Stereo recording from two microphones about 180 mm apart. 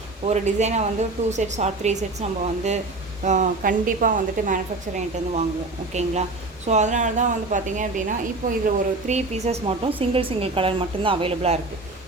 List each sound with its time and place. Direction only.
0.3 s a woman's voice: 40° right (ahead or behind)